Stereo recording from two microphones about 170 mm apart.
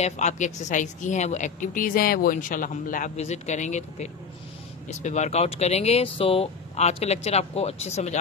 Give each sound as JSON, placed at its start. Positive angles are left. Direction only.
{"t": 0.0, "sound": "a woman's voice", "side_deg": 45}